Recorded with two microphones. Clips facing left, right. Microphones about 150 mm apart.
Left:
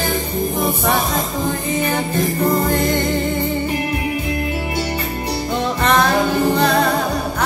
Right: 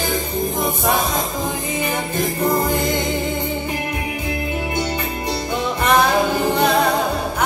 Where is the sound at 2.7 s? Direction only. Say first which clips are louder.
Left 3 dB; 5° right (ahead or behind).